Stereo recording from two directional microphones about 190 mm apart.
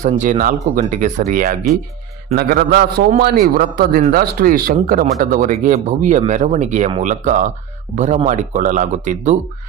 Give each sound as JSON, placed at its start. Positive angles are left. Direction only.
{"t": 0.0, "sound": "a man's voice", "side_deg": -40}